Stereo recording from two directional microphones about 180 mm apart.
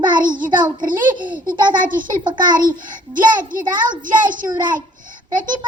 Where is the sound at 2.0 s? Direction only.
25° right (ahead or behind).